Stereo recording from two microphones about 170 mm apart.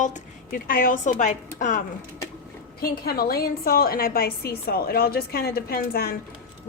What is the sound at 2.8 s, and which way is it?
A woman's voice, 65° left (ahead or behind).